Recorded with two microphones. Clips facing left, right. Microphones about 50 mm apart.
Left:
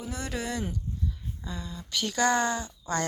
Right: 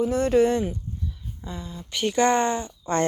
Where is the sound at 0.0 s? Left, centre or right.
Right.